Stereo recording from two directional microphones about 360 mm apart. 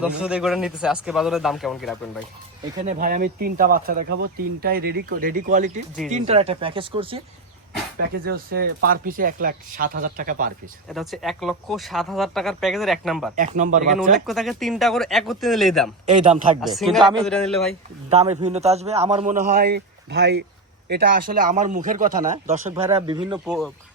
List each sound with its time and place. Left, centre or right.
0.0 s speech: centre
2.8 s speech: right
7.9 s speech: right
10.9 s speech: centre
13.3 s speech: right
14.3 s speech: centre
16.0 s speech: centre
16.6 s speech: centre
18.1 s speech: centre
23.5 s speech: centre